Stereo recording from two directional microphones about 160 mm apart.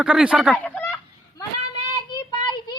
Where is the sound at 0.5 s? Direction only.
10° left (ahead or behind).